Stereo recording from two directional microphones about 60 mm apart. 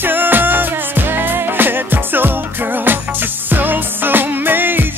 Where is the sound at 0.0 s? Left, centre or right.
Right.